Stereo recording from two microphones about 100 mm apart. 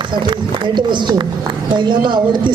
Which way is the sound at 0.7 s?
50° right (ahead or behind).